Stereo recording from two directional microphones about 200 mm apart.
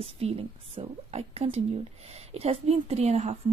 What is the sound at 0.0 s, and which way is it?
A woman's voice, 30° right (ahead or behind).